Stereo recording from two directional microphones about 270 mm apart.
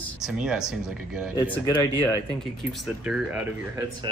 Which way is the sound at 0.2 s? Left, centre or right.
Centre.